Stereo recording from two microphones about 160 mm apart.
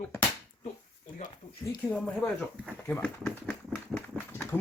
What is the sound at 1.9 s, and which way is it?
Speech, 10° left (ahead or behind).